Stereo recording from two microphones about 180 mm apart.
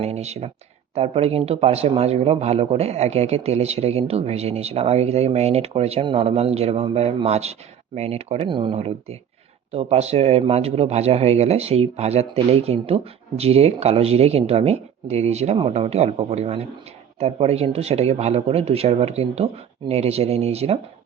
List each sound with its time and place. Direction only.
0.0 s speech: 35° right (ahead or behind)